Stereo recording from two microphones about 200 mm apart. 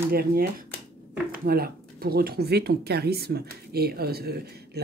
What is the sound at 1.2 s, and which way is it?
Speech, 50° right (ahead or behind).